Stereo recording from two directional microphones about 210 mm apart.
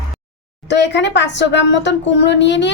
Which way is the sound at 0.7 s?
55° left (ahead or behind).